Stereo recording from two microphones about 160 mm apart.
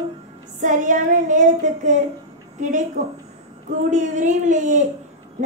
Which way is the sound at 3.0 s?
50° right (ahead or behind).